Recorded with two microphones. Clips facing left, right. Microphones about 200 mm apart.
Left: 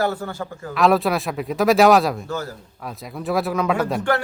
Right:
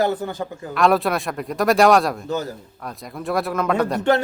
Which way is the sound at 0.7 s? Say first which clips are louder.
Even; centre (ahead or behind).